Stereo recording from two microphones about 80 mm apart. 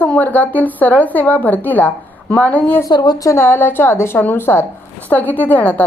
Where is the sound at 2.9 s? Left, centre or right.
Left.